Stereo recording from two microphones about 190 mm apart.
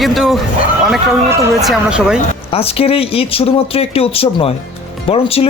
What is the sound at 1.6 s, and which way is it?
Speech, 5° right (ahead or behind).